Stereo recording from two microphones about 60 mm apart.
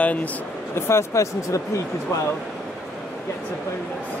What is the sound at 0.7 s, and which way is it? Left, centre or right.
Speech, left.